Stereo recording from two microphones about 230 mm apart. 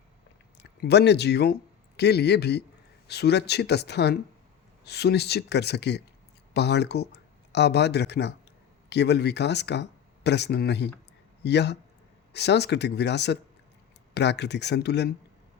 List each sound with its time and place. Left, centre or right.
0.8 s speech: left